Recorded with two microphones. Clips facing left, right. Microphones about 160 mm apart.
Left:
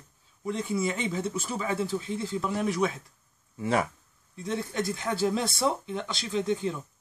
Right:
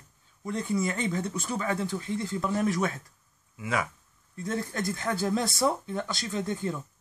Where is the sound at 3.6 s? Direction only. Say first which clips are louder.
Left 4 dB; 35° left (ahead or behind).